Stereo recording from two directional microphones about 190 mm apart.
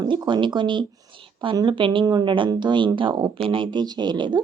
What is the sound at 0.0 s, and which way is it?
A woman's voice, 25° right (ahead or behind).